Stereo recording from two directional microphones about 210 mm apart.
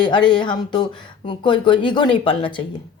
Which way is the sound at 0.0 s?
20° left (ahead or behind).